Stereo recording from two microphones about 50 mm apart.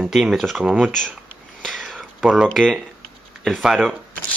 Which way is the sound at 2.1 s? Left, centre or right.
Centre.